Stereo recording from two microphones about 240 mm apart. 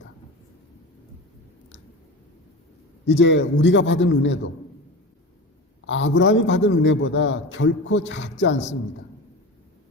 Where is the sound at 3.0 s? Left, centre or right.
Left.